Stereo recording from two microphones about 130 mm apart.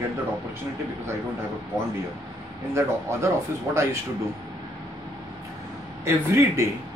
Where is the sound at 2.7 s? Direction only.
20° right (ahead or behind).